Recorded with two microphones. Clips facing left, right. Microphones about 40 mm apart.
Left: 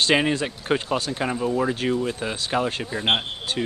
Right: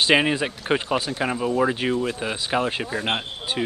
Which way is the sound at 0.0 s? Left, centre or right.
Centre.